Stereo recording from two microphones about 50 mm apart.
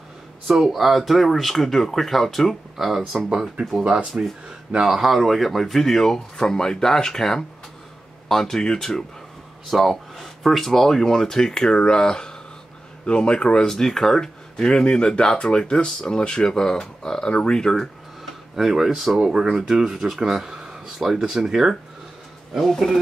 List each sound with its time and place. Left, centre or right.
0.5 s speech: centre
3.3 s speech: centre
4.8 s speech: centre
9.7 s speech: centre
13.7 s speech: centre
18.6 s speech: centre